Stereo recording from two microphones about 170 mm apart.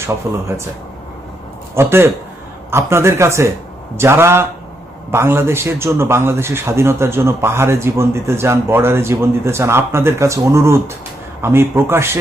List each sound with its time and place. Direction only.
0.3 s a man's voice: 15° right (ahead or behind)
1.7 s a man's voice: 15° right (ahead or behind)